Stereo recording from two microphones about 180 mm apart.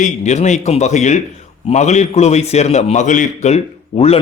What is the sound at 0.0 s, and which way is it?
A man's voice, 40° left (ahead or behind).